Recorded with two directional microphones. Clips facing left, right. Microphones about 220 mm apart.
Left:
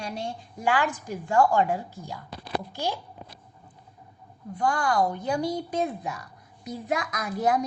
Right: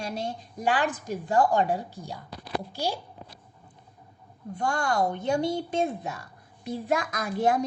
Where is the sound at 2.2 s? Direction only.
20° left (ahead or behind).